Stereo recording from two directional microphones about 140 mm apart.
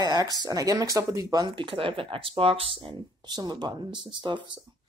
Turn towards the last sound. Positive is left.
turn(degrees=-35)  # may be behind; listen again after turning